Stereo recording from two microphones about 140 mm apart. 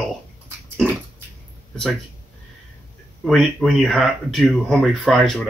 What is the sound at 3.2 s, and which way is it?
Speech, 5° left (ahead or behind).